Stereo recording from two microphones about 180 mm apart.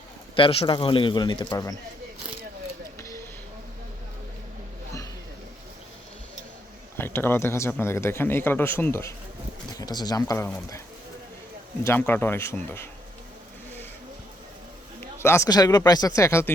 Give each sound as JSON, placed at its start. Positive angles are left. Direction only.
{"t": 0.3, "sound": "speech", "side_deg": 30}
{"t": 6.9, "sound": "speech", "side_deg": 10}
{"t": 11.8, "sound": "speech", "side_deg": 15}
{"t": 15.2, "sound": "speech", "side_deg": 15}